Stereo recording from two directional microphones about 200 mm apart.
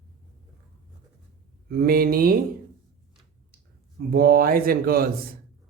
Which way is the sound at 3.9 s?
50° right (ahead or behind).